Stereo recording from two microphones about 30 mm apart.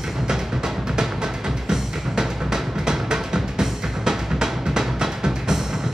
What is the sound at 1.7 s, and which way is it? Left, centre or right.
Music, centre.